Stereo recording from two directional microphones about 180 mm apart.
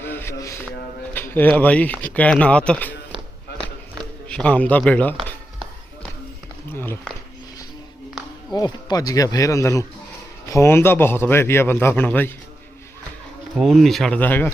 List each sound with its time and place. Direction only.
0.0 s a sound: 10° left (ahead or behind)
1.1 s a man's voice: 10° left (ahead or behind)
4.3 s a man's voice: 5° left (ahead or behind)
6.7 s speech: 10° left (ahead or behind)
8.5 s a man's voice: 20° left (ahead or behind)
13.6 s speech: centre (ahead or behind)